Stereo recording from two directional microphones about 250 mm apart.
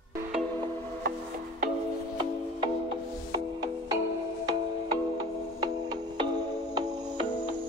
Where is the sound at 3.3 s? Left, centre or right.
Centre.